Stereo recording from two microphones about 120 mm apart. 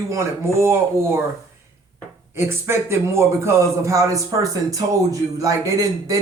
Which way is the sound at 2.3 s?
20° right (ahead or behind).